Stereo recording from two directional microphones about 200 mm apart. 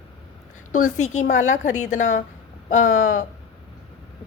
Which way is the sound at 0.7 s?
35° left (ahead or behind).